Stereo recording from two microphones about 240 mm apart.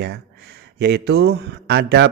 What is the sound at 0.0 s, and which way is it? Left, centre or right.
A man's voice, right.